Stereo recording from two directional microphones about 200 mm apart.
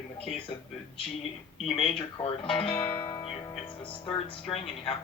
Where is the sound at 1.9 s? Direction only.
25° left (ahead or behind).